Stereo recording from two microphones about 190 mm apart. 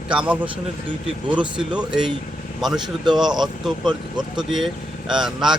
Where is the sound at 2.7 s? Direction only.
25° right (ahead or behind).